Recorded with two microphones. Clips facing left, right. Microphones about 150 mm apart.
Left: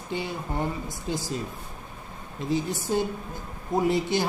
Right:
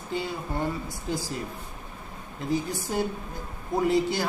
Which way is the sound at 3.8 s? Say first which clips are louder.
Right 1 dB; 20° left (ahead or behind).